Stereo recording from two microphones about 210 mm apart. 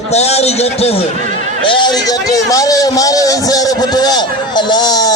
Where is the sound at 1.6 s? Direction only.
20° left (ahead or behind).